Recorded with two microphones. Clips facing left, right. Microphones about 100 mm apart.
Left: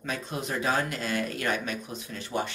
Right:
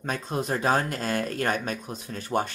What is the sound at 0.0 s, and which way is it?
Speech, 40° right (ahead or behind).